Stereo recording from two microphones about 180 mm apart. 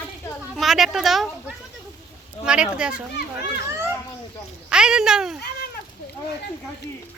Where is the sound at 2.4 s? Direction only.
5° right (ahead or behind).